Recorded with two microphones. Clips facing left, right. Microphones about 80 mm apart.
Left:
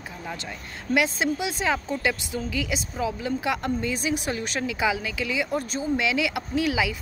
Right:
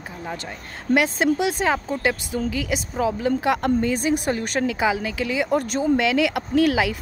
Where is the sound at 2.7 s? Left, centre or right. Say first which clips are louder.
Right 5 dB; right.